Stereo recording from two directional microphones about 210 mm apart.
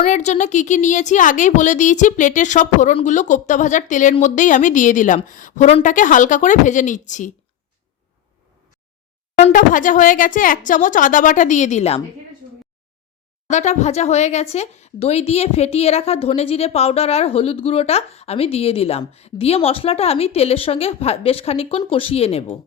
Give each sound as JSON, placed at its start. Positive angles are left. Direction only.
{"t": 0.0, "sound": "a woman's voice", "side_deg": 35}
{"t": 9.4, "sound": "a woman's voice", "side_deg": 40}
{"t": 13.5, "sound": "a woman's voice", "side_deg": 35}